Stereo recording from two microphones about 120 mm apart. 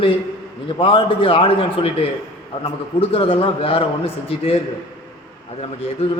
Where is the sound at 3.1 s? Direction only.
50° left (ahead or behind).